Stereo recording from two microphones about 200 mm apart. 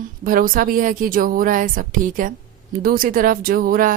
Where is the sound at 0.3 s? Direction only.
45° right (ahead or behind).